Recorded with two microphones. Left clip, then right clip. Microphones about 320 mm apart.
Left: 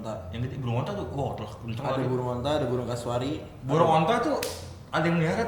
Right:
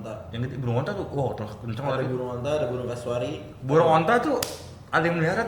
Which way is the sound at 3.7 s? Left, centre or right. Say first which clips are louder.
Right 3 dB; right.